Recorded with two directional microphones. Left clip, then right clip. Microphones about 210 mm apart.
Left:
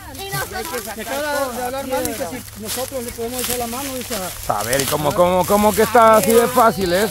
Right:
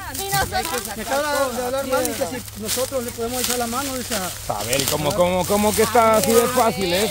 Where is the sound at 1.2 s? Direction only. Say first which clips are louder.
Even; 5° left (ahead or behind).